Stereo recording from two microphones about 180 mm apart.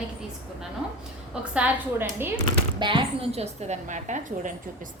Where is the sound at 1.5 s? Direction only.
10° right (ahead or behind).